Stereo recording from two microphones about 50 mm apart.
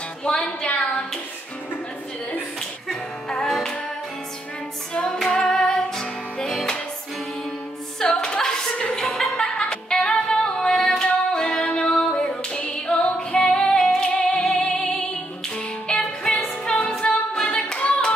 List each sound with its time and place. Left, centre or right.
0.2 s speech: centre
2.9 s music: centre
4.9 s music: centre
8.0 s music: centre
16.4 s music: left
17.0 s singing: centre